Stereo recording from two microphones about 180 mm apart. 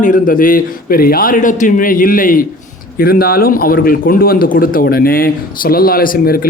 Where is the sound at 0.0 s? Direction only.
50° left (ahead or behind).